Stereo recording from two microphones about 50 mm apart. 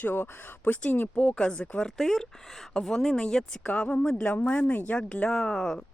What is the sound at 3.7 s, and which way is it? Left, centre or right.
Speech, left.